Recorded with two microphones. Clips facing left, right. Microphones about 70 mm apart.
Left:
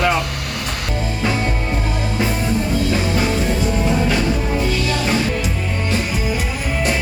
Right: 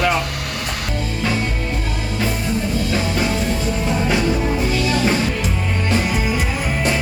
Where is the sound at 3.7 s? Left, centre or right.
Centre.